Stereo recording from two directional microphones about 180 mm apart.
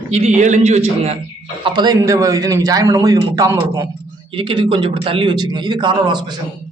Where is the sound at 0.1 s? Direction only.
40° right (ahead or behind).